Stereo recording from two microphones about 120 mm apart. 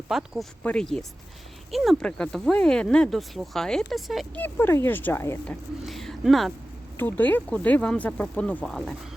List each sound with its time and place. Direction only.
0.1 s speech: 5° right (ahead or behind)
0.6 s speech: 10° left (ahead or behind)
4.4 s speech: 15° left (ahead or behind)
5.8 s speech: centre (ahead or behind)
6.9 s speech: 15° left (ahead or behind)